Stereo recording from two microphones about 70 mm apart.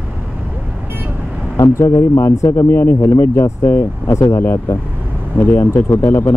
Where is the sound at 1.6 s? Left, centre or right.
Left.